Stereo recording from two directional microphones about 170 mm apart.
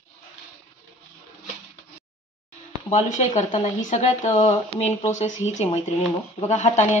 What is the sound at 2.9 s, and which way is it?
Speech, 45° left (ahead or behind).